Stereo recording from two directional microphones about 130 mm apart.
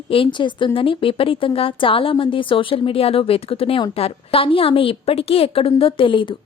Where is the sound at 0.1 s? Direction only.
40° left (ahead or behind).